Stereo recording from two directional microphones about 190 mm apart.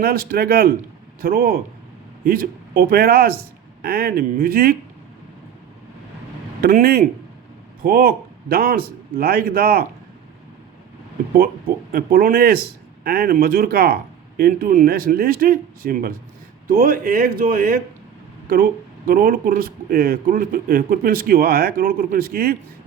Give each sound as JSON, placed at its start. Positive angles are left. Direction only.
{"t": 0.0, "sound": "speech", "side_deg": -55}
{"t": 6.6, "sound": "a man's voice", "side_deg": -50}
{"t": 11.9, "sound": "speech", "side_deg": -50}